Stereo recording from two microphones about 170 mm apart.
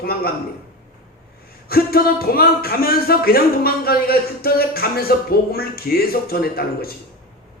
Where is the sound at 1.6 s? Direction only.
65° left (ahead or behind).